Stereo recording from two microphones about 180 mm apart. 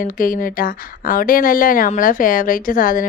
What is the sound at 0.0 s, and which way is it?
Speech, 50° left (ahead or behind).